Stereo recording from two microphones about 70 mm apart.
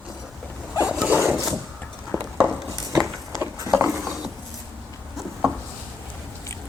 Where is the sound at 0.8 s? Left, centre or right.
Centre.